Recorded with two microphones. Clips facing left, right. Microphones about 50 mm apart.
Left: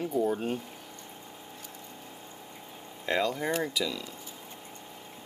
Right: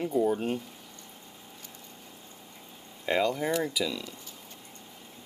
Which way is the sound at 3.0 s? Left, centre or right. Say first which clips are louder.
Right 2 dB; centre.